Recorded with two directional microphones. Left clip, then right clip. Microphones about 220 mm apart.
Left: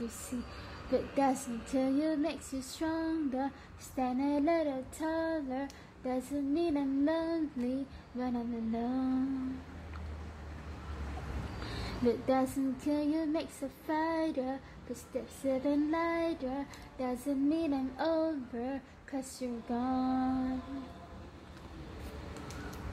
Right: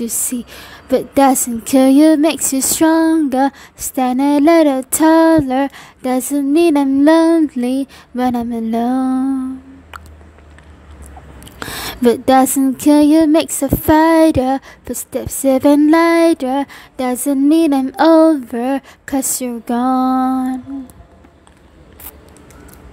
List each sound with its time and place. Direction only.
0.9 s speech: 50° right (ahead or behind)
12.0 s speech: 55° right (ahead or behind)